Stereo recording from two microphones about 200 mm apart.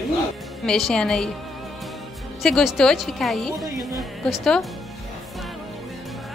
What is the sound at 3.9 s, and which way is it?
Music, centre (ahead or behind).